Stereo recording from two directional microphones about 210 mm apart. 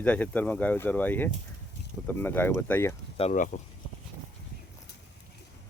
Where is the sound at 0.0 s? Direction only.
5° left (ahead or behind).